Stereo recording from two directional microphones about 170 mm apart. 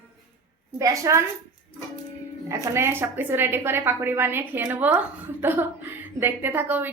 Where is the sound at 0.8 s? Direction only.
20° right (ahead or behind).